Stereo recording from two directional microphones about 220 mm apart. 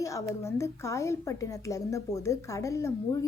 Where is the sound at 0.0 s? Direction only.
15° left (ahead or behind).